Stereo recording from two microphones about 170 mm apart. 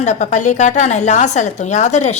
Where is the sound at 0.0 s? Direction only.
45° left (ahead or behind).